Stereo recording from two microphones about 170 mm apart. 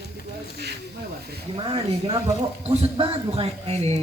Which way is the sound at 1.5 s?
30° right (ahead or behind).